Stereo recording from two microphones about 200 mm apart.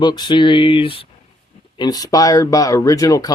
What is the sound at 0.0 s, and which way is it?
Speech, 20° left (ahead or behind).